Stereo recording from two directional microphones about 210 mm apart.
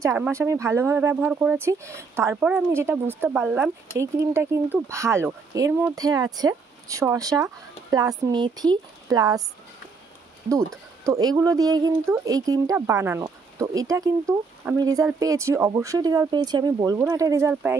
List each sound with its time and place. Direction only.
0.0 s speech: 15° right (ahead or behind)
10.5 s speech: 15° right (ahead or behind)